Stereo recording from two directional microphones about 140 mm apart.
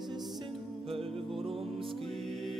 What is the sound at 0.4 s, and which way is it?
Music, 40° right (ahead or behind).